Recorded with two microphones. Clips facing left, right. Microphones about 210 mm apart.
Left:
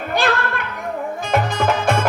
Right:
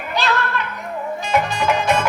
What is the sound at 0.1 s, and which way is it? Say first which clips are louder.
Children playing: left 1 dB; 50° left (ahead or behind).